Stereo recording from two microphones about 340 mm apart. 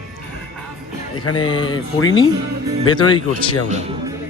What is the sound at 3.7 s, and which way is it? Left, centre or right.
Speech, centre.